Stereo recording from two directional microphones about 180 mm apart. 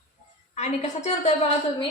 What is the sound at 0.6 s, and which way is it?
Speech, 40° left (ahead or behind).